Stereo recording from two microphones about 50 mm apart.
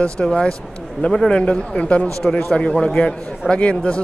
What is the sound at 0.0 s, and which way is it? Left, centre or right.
Speech, centre.